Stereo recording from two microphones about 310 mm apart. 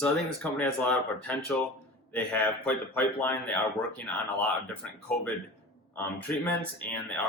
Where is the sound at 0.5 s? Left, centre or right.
Centre.